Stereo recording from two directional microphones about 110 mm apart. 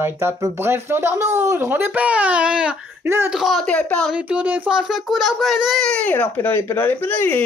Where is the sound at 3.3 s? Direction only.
Centre (ahead or behind).